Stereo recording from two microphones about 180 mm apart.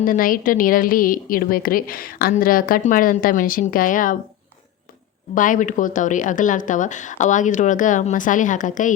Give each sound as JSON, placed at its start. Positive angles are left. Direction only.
{"t": 0.0, "sound": "a woman's voice", "side_deg": 50}
{"t": 5.3, "sound": "a woman's voice", "side_deg": 45}